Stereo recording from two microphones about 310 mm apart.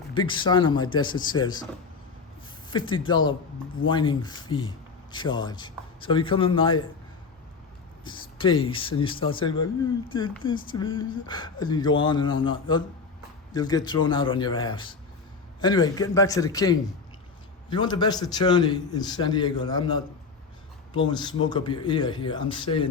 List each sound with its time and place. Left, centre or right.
0.1 s a man's voice: centre
2.6 s a man's voice: centre
8.0 s a sound: centre
8.6 s a man's voice: centre